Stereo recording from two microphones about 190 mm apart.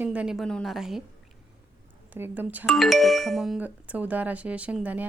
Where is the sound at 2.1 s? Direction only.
10° right (ahead or behind).